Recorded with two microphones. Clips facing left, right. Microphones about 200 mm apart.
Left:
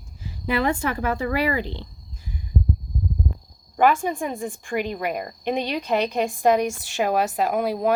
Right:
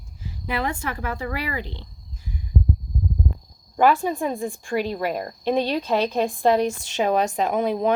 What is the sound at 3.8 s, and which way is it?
Speech, 50° left (ahead or behind).